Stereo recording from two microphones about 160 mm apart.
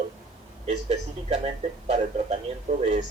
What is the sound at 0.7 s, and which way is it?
Speech, 40° right (ahead or behind).